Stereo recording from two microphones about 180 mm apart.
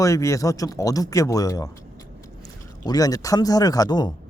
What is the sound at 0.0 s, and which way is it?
Speech, 15° left (ahead or behind).